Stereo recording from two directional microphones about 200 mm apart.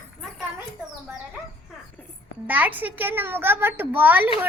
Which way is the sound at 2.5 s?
10° right (ahead or behind).